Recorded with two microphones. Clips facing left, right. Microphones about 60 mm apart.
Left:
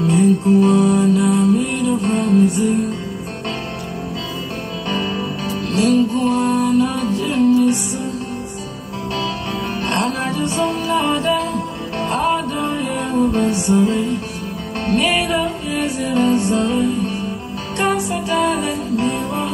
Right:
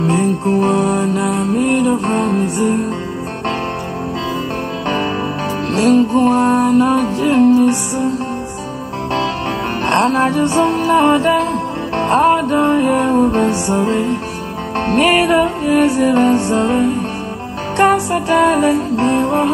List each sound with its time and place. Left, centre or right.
0.0 s music: right
0.6 s music: right
2.4 s music: right
5.7 s music: right
9.8 s music: right
13.5 s music: right
13.8 s music: right
18.1 s music: right